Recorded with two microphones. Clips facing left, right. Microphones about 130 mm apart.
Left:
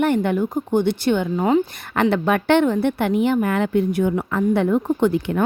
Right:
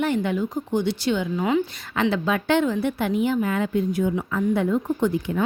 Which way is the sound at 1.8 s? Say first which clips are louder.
Left 4 dB; 60° left (ahead or behind).